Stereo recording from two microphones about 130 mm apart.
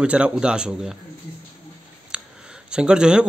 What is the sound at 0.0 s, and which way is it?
Speech, 10° right (ahead or behind).